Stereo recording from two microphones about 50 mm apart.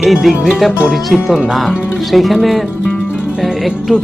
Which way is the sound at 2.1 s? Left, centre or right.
Centre.